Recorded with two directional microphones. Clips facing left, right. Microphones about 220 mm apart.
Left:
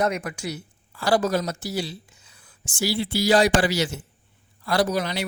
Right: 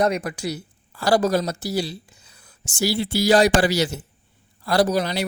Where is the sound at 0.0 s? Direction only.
35° right (ahead or behind).